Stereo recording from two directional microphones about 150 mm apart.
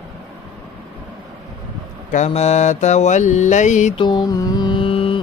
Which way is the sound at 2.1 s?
50° left (ahead or behind).